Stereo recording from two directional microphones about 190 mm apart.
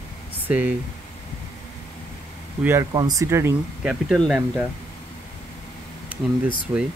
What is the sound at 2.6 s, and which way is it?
Speech, 15° right (ahead or behind).